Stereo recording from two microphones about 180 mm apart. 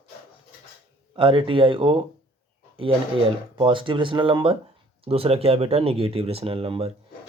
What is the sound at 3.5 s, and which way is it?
Speech, 30° right (ahead or behind).